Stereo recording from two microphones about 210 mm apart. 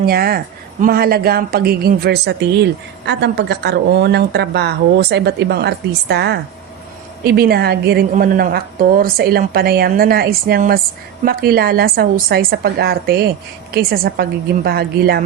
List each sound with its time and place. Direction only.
0.0 s a woman's voice: 45° right (ahead or behind)